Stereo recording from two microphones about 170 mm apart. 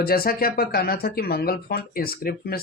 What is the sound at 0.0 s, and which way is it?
Speech, 60° left (ahead or behind).